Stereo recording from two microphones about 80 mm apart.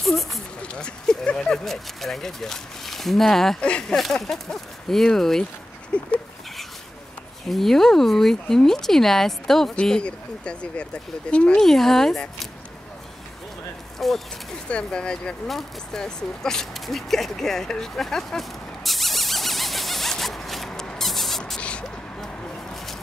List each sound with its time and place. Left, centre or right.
0.0 s a sound: centre
0.6 s speech: centre
5.9 s goat: centre
7.4 s speech: centre
13.9 s speech: centre
14.7 s a sound: centre